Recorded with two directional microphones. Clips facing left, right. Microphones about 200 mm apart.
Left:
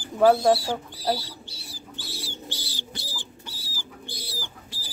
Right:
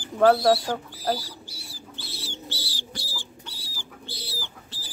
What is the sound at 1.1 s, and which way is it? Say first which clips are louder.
Bird: even; 25° left (ahead or behind).